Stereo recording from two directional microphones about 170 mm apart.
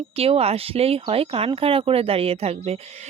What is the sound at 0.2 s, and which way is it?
Speech, 35° right (ahead or behind).